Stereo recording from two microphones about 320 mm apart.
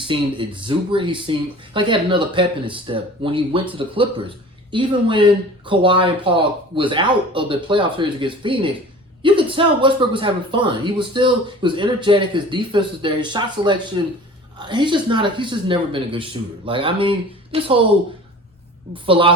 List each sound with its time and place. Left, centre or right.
0.1 s speech: centre
19.0 s speech: centre